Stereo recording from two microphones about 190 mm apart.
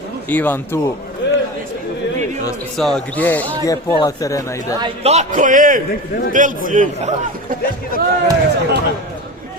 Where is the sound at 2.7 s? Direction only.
5° left (ahead or behind).